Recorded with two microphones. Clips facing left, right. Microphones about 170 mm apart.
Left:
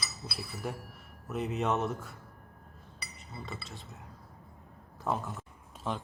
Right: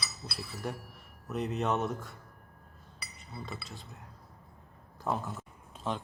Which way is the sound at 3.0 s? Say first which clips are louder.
Right 1 dB; centre (ahead or behind).